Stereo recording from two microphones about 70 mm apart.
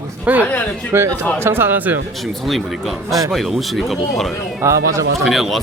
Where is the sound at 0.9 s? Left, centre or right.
Right.